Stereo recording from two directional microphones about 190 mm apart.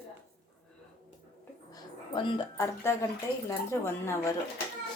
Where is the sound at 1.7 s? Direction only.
20° left (ahead or behind).